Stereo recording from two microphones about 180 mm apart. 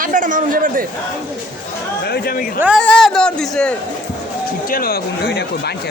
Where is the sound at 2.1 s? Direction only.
55° left (ahead or behind).